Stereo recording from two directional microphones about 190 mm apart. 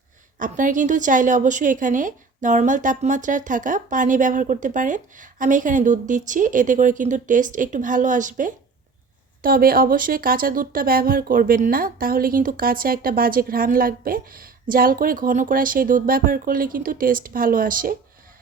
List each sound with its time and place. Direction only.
0.3 s speech: 45° right (ahead or behind)